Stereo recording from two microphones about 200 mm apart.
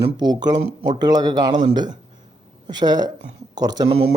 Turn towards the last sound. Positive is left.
turn(degrees=-20)  # may be behind; listen again after turning